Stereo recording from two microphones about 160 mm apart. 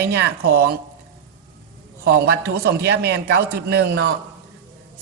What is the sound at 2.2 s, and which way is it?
A man's voice, 90° right.